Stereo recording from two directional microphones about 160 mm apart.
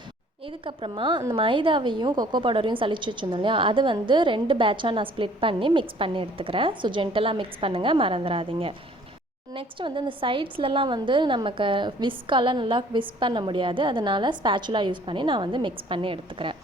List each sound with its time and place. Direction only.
0.6 s a woman's voice: 35° right (ahead or behind)